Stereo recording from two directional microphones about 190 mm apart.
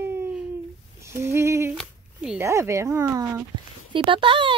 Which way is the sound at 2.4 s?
15° right (ahead or behind).